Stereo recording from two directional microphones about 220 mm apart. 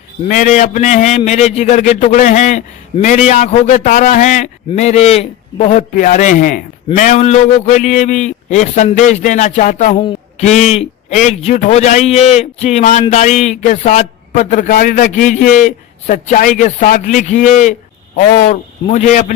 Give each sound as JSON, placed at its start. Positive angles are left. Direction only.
{"t": 0.3, "sound": "a man's voice", "side_deg": 35}